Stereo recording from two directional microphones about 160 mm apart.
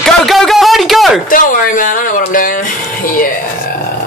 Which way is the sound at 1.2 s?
60° left (ahead or behind).